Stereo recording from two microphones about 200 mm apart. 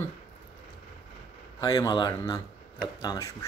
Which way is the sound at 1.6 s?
20° left (ahead or behind).